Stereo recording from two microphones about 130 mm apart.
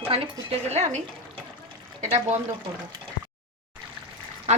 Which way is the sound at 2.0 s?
55° right (ahead or behind).